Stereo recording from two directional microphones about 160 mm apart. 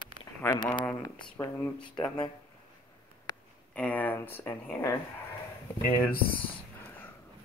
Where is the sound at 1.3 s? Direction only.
15° left (ahead or behind).